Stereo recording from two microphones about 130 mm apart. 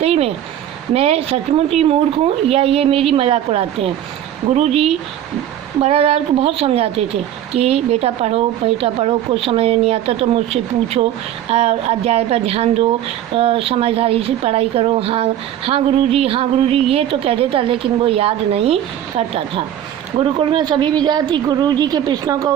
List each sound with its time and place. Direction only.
0.0 s a woman's voice: 50° right (ahead or behind); by 22.5 s 30° right (ahead or behind)